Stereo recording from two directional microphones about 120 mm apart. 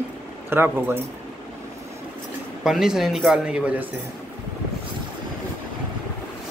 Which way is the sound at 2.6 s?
5° right (ahead or behind).